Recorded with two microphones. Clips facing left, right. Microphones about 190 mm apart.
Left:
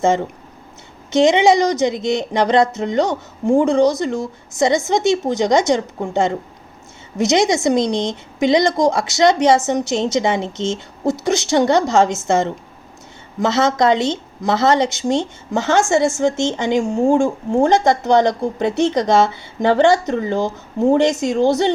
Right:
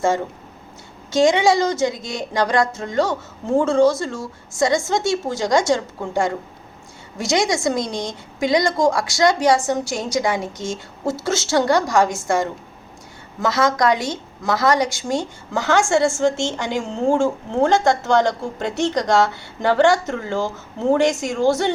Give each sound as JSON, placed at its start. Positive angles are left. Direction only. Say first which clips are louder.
{"t": 1.1, "sound": "a woman's voice", "louder": "left 3 dB", "side_deg": 20}